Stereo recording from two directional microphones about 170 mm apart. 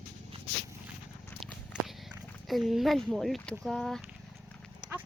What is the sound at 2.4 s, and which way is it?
Speech, centre (ahead or behind).